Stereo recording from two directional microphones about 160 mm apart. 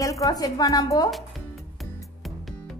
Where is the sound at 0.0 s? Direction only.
20° left (ahead or behind).